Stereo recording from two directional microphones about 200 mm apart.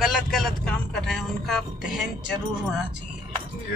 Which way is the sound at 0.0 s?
Centre (ahead or behind).